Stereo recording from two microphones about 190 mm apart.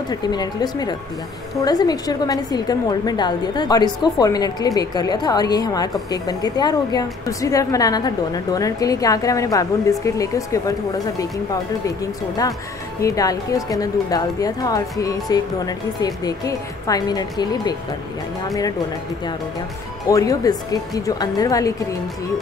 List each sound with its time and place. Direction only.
0.1 s a woman's voice: 20° left (ahead or behind)
13.0 s a woman's voice: 20° left (ahead or behind)
20.1 s a woman's voice: 20° left (ahead or behind)